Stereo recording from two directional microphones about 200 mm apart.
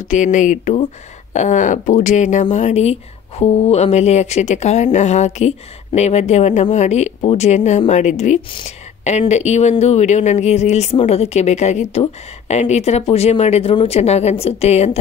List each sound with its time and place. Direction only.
0.1 s speech: 40° left (ahead or behind)